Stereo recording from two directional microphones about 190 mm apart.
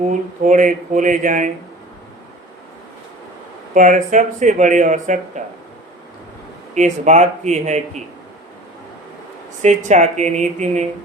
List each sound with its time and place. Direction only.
0.1 s speech: 40° right (ahead or behind)
3.8 s speech: 40° right (ahead or behind)
6.7 s speech: 40° right (ahead or behind)
9.6 s speech: 40° right (ahead or behind)